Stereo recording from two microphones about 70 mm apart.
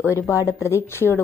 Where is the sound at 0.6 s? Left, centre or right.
Left.